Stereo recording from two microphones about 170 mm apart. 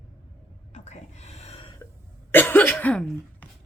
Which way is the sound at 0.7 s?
45° left (ahead or behind).